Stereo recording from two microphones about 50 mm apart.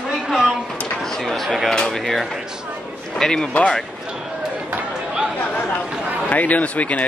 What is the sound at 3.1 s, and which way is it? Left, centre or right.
Speech, centre.